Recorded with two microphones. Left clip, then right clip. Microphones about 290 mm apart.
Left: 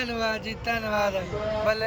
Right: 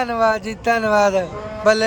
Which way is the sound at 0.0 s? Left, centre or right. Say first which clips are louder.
Right 10 dB; centre.